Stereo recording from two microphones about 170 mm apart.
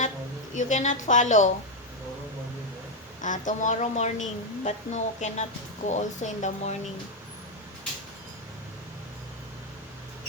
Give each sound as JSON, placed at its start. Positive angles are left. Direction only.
{"t": 0.5, "sound": "a woman's voice", "side_deg": 45}
{"t": 3.2, "sound": "a woman's voice", "side_deg": 50}